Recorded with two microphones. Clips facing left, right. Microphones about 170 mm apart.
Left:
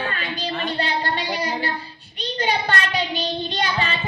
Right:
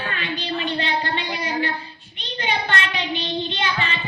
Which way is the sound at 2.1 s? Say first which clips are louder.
Left 3 dB; 40° left (ahead or behind).